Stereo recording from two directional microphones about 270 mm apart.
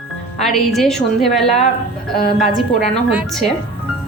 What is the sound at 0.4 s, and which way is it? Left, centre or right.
A woman's voice, centre.